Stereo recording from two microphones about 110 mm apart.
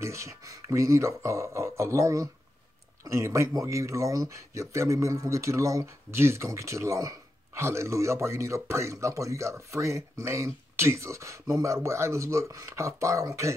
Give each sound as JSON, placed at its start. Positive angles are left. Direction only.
{"t": 0.0, "sound": "speech", "side_deg": -25}